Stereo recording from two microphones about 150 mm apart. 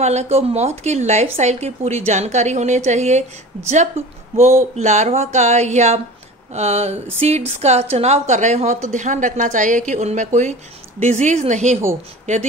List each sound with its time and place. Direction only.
0.0 s a woman's voice: 45° right (ahead or behind)